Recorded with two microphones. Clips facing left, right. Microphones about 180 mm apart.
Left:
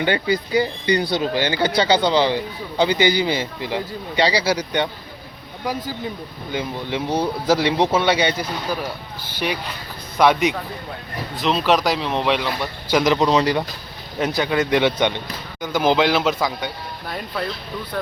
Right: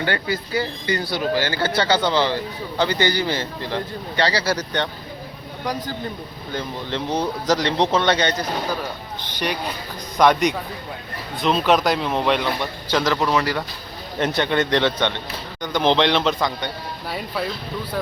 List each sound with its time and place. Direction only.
0.0 s speech: 20° left (ahead or behind)
6.5 s speech: 10° left (ahead or behind)
12.9 s speech: 15° left (ahead or behind)
14.2 s speech: centre (ahead or behind)
17.1 s speech: 5° right (ahead or behind)